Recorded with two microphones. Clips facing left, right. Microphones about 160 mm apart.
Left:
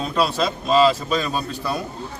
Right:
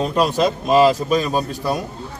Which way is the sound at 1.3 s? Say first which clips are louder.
Right 4 dB; 40° right (ahead or behind).